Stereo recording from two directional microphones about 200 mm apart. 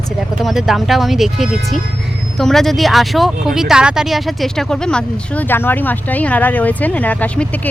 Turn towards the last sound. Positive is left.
turn(degrees=10)  # may be behind; listen again after turning